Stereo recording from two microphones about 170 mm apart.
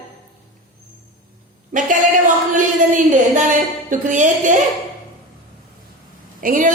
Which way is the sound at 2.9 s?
50° right (ahead or behind).